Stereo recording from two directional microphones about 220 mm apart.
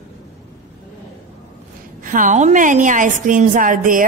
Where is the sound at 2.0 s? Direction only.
35° right (ahead or behind).